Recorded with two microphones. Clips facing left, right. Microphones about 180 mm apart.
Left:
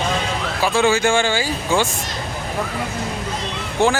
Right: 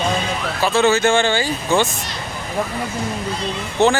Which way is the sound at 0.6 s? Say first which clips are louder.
Right 1 dB; 10° left (ahead or behind).